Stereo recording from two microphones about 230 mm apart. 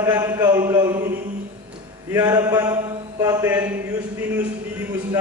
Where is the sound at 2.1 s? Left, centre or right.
Centre.